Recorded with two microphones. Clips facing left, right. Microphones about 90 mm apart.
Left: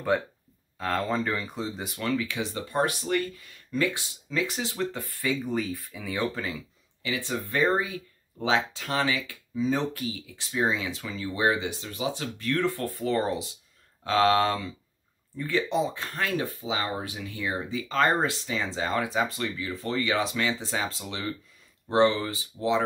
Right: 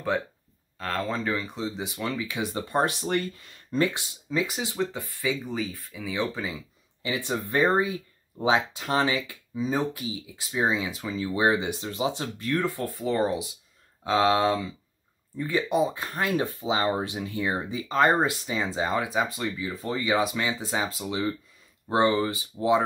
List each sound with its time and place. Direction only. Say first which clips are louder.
0.7 s speech: left 2 dB; centre (ahead or behind)
2.3 s speech: right 2 dB; 25° right (ahead or behind)
4.5 s speech: right 1 dB; 5° right (ahead or behind)
7.2 s speech: right 2 dB; 20° right (ahead or behind)
9.7 s speech: right 1 dB; 5° right (ahead or behind)
12.5 s speech: right 1 dB; 10° right (ahead or behind)